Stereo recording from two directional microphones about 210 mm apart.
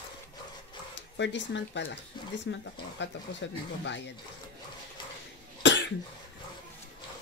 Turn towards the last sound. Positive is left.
turn(degrees=60)  # may be behind; listen again after turning